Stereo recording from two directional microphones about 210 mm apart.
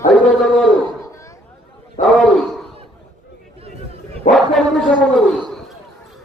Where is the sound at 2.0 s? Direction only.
Centre (ahead or behind).